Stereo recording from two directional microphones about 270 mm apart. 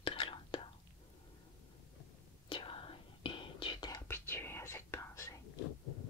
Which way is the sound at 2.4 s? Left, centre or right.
Centre.